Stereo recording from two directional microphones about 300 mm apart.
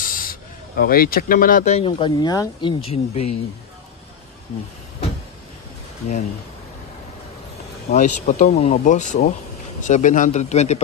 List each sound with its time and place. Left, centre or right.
0.0 s speech: left
7.9 s speech: left